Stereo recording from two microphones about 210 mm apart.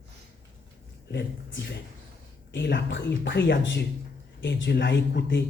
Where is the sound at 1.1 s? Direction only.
55° left (ahead or behind).